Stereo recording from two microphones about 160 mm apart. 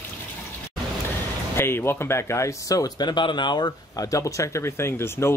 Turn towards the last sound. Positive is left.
turn(degrees=15)  # may be behind; listen again after turning